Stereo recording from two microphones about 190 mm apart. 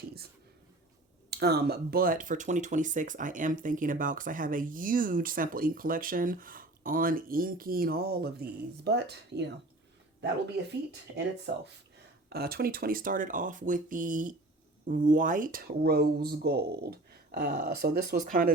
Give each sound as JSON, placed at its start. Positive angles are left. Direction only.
{"t": 1.3, "sound": "speech", "side_deg": -55}
{"t": 11.5, "sound": "speech", "side_deg": -60}